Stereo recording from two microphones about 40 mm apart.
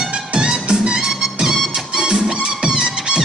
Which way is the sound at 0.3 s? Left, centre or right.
Right.